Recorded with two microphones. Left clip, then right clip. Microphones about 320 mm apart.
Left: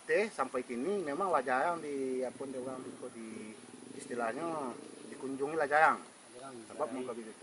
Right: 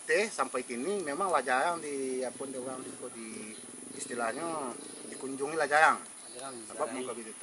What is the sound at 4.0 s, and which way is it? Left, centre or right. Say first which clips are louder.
Speech: right 2 dB; centre.